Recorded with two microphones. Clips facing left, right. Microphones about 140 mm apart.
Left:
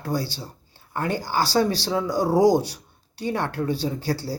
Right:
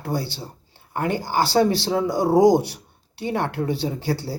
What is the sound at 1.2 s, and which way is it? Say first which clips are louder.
Speech: right 2 dB; 55° right (ahead or behind).